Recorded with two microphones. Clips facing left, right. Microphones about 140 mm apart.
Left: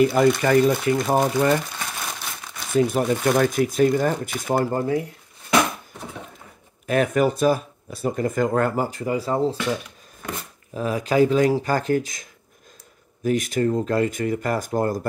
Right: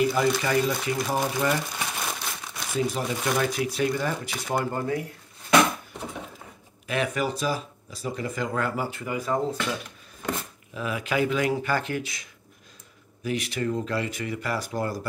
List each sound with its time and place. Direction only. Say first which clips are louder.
0.0 s speech: left 6 dB; 55° left (ahead or behind)
1.8 s crumpling: even; 5° right (ahead or behind)
2.9 s speech: left 7 dB; 50° left (ahead or behind)
4.6 s speech: left 5 dB; 30° left (ahead or behind)
6.9 s speech: left 7 dB; 50° left (ahead or behind); by 9.6 s 30° left (ahead or behind)
10.7 s speech: left 6 dB; 40° left (ahead or behind)